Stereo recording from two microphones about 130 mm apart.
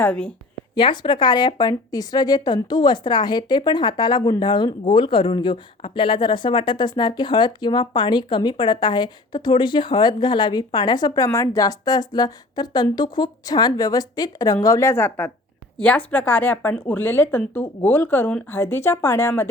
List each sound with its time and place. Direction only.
0.0 s speech: 10° left (ahead or behind)
0.8 s a woman's voice: 40° left (ahead or behind); by 19.5 s 20° left (ahead or behind)